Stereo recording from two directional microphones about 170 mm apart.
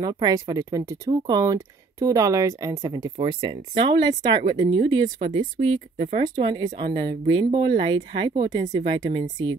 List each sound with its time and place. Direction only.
0.0 s speech: 25° right (ahead or behind)
6.3 s speech: 25° right (ahead or behind)